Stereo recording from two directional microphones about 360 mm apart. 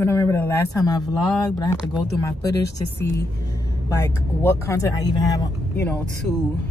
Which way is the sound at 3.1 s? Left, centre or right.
Centre.